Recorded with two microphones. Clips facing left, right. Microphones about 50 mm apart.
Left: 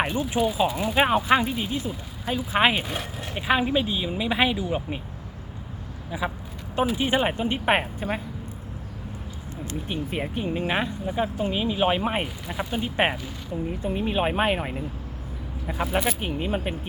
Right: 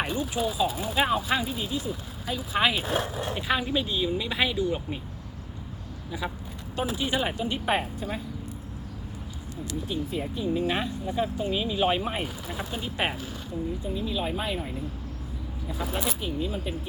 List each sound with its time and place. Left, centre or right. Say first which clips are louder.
0.0 s speech: left 4 dB; left
3.3 s speech: left 5 dB; left
6.1 s speech: left 4 dB; centre
6.7 s speech: left 5 dB; left
10.1 s speech: left 1 dB; left
10.7 s speech: left 2 dB; left
12.1 s speech: left 4 dB; left
13.7 s speech: left 5 dB; left